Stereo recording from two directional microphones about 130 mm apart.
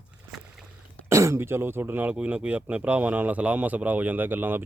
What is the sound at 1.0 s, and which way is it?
Speech, 20° right (ahead or behind).